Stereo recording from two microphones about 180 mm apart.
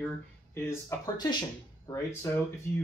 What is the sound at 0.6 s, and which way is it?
Speech, 15° left (ahead or behind).